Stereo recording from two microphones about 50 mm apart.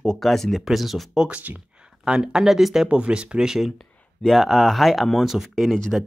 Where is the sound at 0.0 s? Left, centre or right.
Centre.